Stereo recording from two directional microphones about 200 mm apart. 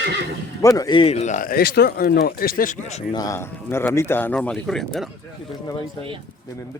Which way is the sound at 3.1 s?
15° left (ahead or behind).